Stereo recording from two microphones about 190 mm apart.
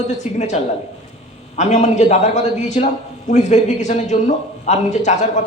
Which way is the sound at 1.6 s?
40° left (ahead or behind).